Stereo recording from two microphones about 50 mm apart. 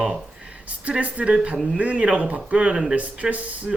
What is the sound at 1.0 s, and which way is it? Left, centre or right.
Speech, right.